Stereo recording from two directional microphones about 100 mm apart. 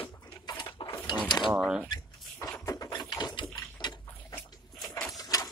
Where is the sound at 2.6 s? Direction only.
40° left (ahead or behind).